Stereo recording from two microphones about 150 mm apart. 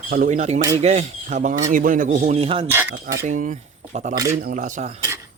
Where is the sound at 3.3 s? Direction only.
55° right (ahead or behind).